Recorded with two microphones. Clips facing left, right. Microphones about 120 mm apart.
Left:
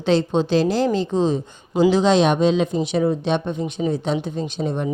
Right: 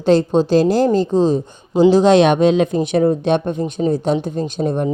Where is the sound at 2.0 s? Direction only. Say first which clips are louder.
Right 5 dB; 60° right (ahead or behind).